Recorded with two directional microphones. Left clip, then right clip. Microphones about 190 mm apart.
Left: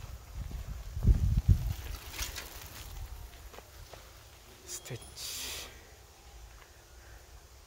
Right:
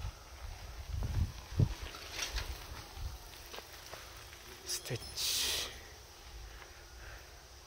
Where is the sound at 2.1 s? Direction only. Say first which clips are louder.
Right 1 dB; 40° left (ahead or behind).